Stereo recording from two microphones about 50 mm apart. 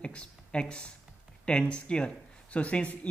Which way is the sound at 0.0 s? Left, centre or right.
Left.